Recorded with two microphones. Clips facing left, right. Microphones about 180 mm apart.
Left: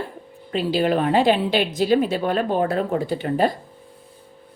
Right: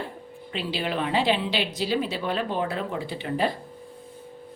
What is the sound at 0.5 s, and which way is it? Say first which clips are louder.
A woman's voice: left 9 dB; 45° left (ahead or behind).